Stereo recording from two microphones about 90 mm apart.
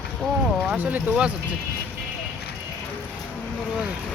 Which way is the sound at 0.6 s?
15° right (ahead or behind).